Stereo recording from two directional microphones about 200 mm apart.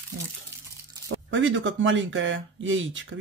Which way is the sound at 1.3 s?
70° right (ahead or behind).